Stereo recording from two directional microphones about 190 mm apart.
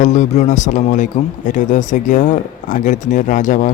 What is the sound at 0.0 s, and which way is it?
A man's voice, 40° left (ahead or behind).